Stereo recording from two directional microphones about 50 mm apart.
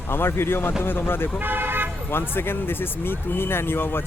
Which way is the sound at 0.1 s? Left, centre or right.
Left.